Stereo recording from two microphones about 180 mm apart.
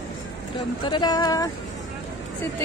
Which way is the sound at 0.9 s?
25° left (ahead or behind).